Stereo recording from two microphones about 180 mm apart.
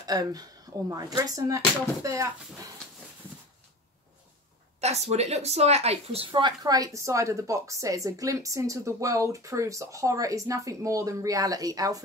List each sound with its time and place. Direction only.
0.0 s speech: 20° right (ahead or behind)
4.7 s speech: 35° right (ahead or behind); by 12.0 s 20° right (ahead or behind)